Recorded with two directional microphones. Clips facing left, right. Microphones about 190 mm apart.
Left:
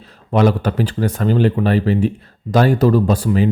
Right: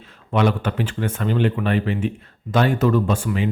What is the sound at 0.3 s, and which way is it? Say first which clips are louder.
Speech: left 5 dB; 40° left (ahead or behind).